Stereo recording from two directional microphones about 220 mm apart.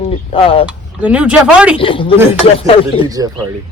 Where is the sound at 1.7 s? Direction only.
25° left (ahead or behind).